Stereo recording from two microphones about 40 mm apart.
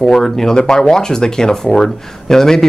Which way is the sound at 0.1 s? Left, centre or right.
Centre.